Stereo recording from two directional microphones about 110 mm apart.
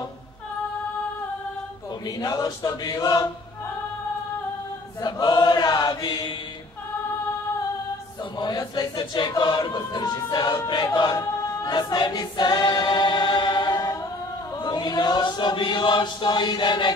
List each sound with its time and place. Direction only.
2.0 s chant: 35° left (ahead or behind)
5.0 s chant: 40° left (ahead or behind)
8.4 s chant: 40° left (ahead or behind)
9.4 s choir: 45° left (ahead or behind)
14.6 s chant: 40° left (ahead or behind)